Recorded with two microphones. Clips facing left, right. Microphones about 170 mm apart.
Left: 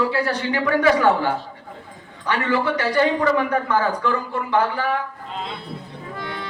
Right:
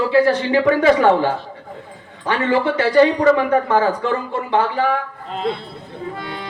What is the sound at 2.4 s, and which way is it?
A man's voice, 25° right (ahead or behind).